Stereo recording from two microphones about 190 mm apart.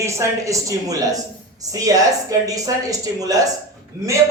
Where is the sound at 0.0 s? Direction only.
15° right (ahead or behind).